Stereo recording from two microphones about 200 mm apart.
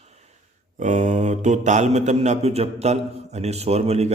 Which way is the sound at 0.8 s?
35° right (ahead or behind).